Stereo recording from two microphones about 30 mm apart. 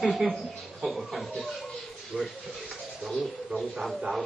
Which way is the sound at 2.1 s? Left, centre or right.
Left.